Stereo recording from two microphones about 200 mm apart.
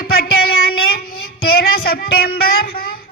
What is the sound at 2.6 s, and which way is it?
Speech, 45° left (ahead or behind).